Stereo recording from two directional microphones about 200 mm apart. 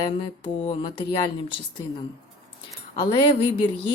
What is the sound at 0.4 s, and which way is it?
Speech, 25° left (ahead or behind).